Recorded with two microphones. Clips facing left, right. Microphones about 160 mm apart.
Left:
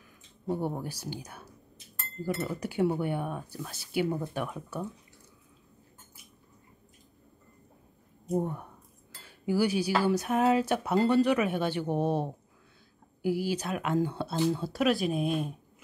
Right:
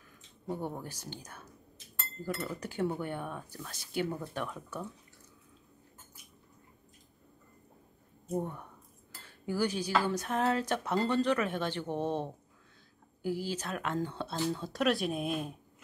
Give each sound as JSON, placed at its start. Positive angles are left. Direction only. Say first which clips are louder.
{"t": 0.5, "sound": "cutlery", "louder": "left 5 dB", "side_deg": 10}
{"t": 8.3, "sound": "cutlery", "louder": "left 5 dB", "side_deg": 10}